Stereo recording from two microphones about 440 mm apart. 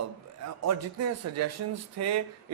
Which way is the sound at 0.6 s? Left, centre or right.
Right.